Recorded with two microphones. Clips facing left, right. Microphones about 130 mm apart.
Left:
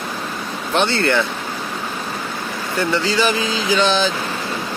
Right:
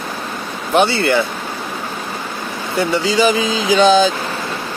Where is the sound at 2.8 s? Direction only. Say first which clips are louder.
Right 4 dB; 15° right (ahead or behind).